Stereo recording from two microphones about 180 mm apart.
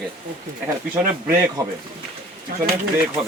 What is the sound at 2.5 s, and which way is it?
Speech, 55° right (ahead or behind).